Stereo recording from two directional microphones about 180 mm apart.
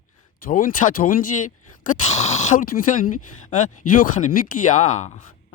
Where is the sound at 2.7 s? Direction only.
50° left (ahead or behind).